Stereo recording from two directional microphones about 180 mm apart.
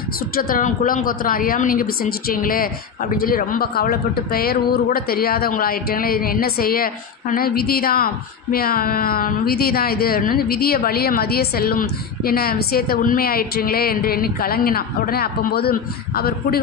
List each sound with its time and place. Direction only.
0.4 s a woman's voice: 50° left (ahead or behind)